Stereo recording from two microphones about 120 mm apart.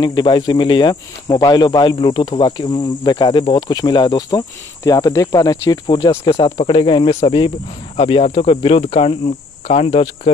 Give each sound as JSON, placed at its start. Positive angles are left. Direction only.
{"t": 0.0, "sound": "speech", "side_deg": 40}
{"t": 6.3, "sound": "cricket", "side_deg": 50}
{"t": 9.7, "sound": "speech", "side_deg": 55}